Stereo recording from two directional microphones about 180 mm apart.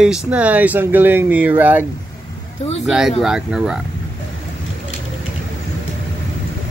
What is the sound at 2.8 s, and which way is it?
Speech, 5° right (ahead or behind).